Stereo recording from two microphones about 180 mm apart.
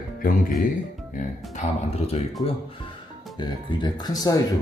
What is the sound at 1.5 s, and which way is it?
Speech, 35° left (ahead or behind).